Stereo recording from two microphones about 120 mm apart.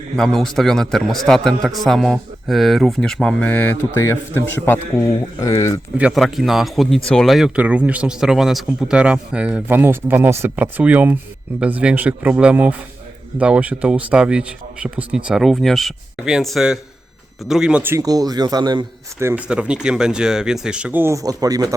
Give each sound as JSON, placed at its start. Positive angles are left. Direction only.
{"t": 0.2, "sound": "a man's voice", "side_deg": 5}
{"t": 6.0, "sound": "speech", "side_deg": -10}
{"t": 17.9, "sound": "speech", "side_deg": -30}
{"t": 19.2, "sound": "speech", "side_deg": -15}